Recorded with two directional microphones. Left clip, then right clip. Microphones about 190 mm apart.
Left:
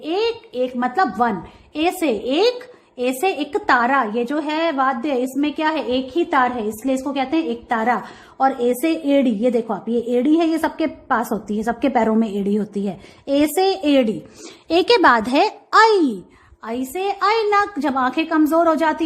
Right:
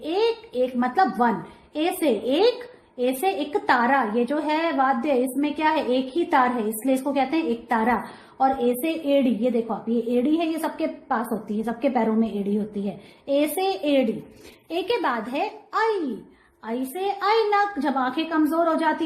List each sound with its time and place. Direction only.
0.0 s a sound: 20° left (ahead or behind)
1.7 s a woman's voice: 20° left (ahead or behind)
8.4 s a woman's voice: 35° left (ahead or behind); by 16.0 s 50° left (ahead or behind)
16.6 s a woman's voice: 25° left (ahead or behind)